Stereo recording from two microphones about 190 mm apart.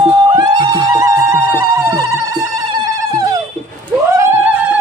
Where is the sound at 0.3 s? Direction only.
20° right (ahead or behind).